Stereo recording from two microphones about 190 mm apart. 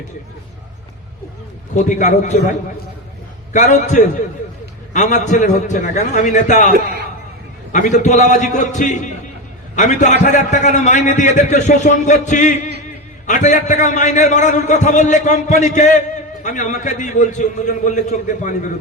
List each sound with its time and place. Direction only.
1.7 s a man's voice: 40° left (ahead or behind)